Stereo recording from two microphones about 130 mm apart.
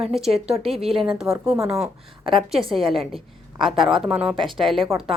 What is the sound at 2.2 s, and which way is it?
Speech, 45° right (ahead or behind).